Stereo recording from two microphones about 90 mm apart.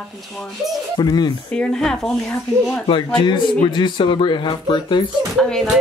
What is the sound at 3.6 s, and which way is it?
Speech, 60° left (ahead or behind).